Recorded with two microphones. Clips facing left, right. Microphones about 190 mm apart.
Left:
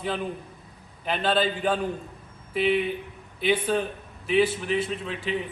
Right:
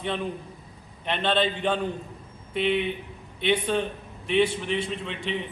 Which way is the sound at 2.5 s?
5° left (ahead or behind).